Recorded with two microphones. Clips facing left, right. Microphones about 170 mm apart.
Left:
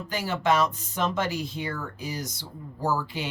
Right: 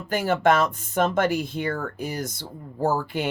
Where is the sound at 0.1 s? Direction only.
55° right (ahead or behind).